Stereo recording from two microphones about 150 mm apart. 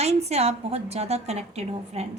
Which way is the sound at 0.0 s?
45° right (ahead or behind).